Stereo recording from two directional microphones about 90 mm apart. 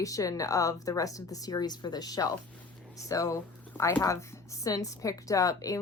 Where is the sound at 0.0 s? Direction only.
40° left (ahead or behind).